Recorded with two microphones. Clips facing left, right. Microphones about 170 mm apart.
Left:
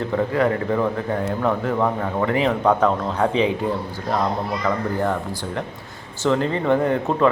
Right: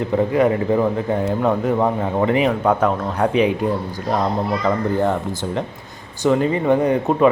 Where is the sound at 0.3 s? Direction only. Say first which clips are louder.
Right 4 dB; 20° right (ahead or behind).